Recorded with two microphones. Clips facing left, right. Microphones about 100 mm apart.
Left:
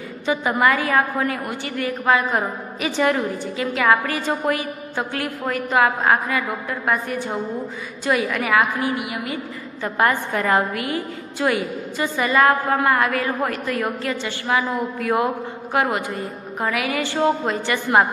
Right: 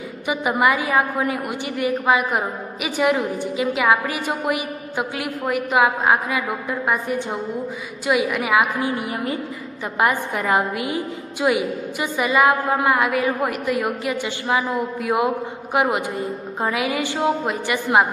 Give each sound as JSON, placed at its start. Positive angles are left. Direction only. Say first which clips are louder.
{"t": 0.3, "sound": "a woman's voice", "louder": "even", "side_deg": -15}
{"t": 8.9, "sound": "a woman's voice", "louder": "right 2 dB", "side_deg": -35}
{"t": 9.9, "sound": "a woman's voice", "louder": "even", "side_deg": -15}